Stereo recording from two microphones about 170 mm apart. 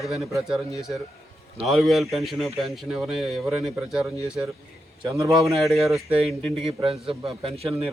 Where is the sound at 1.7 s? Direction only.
Centre (ahead or behind).